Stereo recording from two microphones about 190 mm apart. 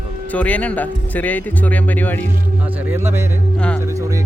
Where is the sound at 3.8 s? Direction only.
15° right (ahead or behind).